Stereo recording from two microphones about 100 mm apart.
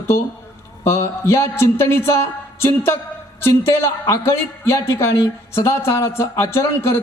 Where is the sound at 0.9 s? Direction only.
25° left (ahead or behind).